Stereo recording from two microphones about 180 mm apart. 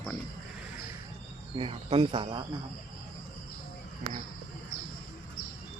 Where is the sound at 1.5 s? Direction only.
30° right (ahead or behind).